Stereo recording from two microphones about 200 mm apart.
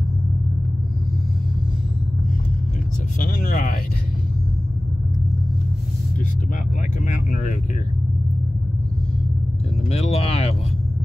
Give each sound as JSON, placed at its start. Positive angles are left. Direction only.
{"t": 3.2, "sound": "speech", "side_deg": 45}
{"t": 7.1, "sound": "speech", "side_deg": 40}
{"t": 9.8, "sound": "speech", "side_deg": 30}